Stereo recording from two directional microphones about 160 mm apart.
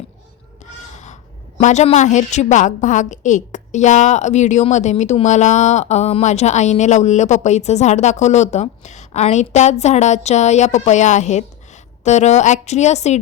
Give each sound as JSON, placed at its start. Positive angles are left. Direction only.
{"t": 0.6, "sound": "a woman's voice", "side_deg": 45}